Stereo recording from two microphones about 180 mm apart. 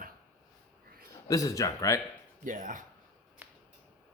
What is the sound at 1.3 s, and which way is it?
Speech, 20° left (ahead or behind).